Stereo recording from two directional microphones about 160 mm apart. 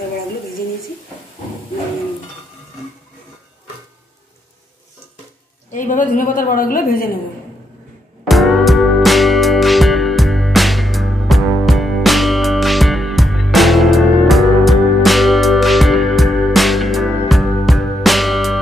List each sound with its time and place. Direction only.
5.7 s a woman's voice: 55° left (ahead or behind)
8.3 s music: centre (ahead or behind)